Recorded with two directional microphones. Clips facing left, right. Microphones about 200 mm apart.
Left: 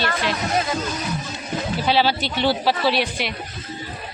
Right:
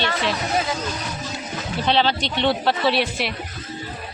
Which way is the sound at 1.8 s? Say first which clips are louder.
Even; 5° left (ahead or behind).